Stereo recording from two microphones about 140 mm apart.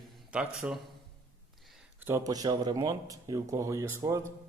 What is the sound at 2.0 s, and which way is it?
Speech, 20° right (ahead or behind).